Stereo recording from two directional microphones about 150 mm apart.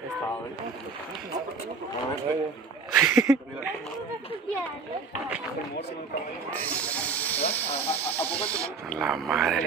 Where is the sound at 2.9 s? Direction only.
15° right (ahead or behind).